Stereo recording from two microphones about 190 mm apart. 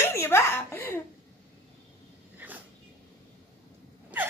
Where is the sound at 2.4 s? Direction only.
10° right (ahead or behind).